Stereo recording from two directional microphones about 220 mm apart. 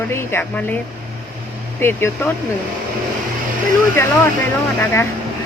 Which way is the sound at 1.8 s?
10° left (ahead or behind).